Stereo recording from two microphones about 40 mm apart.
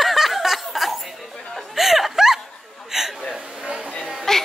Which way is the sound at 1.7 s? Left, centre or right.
Centre.